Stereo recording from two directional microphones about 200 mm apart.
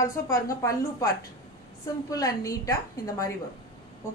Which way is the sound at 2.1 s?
15° left (ahead or behind).